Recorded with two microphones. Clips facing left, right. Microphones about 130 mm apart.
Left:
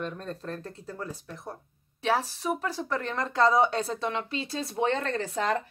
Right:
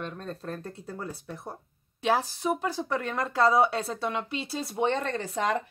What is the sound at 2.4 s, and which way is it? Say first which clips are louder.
A woman's voice: right 2 dB; 10° right (ahead or behind).